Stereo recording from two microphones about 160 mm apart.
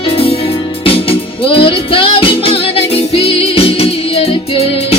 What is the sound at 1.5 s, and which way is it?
Music, 35° left (ahead or behind).